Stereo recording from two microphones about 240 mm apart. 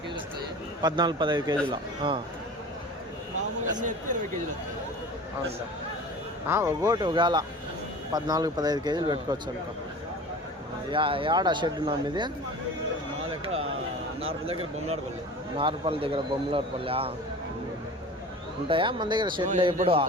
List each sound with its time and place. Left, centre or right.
0.8 s speech: centre
6.5 s speech: centre
10.9 s speech: right
14.4 s speech: right
18.7 s speech: centre